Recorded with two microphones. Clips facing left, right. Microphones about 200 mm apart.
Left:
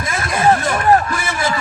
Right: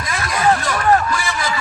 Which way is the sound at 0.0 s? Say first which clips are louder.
Left 2 dB; 25° left (ahead or behind).